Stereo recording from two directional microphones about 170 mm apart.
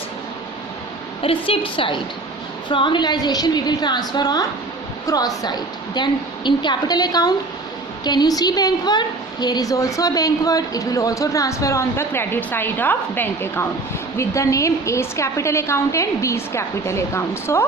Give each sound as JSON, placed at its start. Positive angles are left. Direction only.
{"t": 1.2, "sound": "a woman's voice", "side_deg": 30}